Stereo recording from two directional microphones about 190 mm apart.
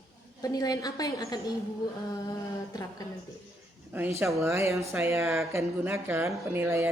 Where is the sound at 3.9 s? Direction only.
10° right (ahead or behind).